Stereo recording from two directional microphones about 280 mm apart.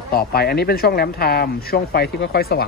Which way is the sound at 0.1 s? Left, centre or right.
Left.